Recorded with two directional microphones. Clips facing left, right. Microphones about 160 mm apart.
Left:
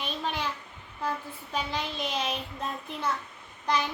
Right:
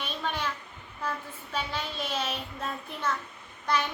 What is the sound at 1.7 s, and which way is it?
A child's voice, 15° left (ahead or behind).